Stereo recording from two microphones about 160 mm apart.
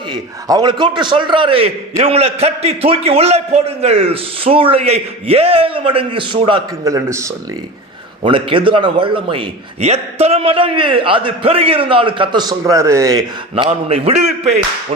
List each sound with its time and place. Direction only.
0.1 s a man's voice: 25° right (ahead or behind)
8.2 s a man's voice: 35° right (ahead or behind)
13.7 s a man's voice: 40° right (ahead or behind)